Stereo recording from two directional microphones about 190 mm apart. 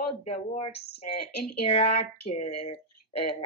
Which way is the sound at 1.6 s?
35° left (ahead or behind).